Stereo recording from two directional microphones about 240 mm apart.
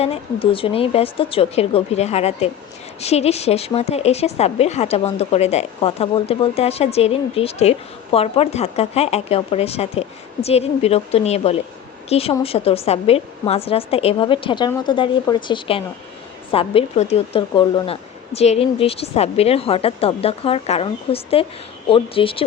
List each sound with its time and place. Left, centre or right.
0.0 s a woman's voice: left